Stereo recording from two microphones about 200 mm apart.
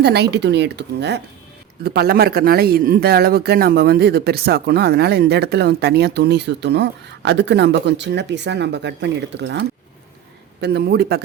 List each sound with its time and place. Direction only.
0.0 s speech: 55° right (ahead or behind)